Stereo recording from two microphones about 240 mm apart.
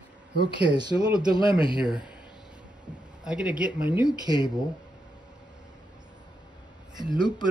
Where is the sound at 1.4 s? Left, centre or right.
Left.